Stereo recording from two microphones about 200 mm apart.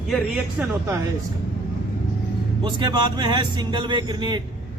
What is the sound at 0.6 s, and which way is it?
Speech, 10° right (ahead or behind).